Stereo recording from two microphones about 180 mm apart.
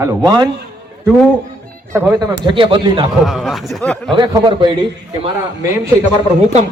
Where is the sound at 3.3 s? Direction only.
Centre (ahead or behind).